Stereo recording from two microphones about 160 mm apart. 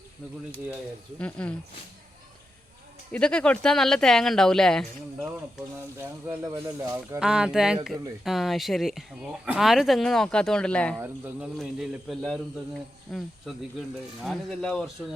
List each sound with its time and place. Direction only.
1.2 s speech: 10° left (ahead or behind)
3.1 s speech: 5° left (ahead or behind)
6.0 s speech: 15° right (ahead or behind)
7.2 s speech: 5° right (ahead or behind)